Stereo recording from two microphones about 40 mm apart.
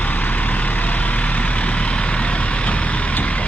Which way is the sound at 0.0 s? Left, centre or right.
Left.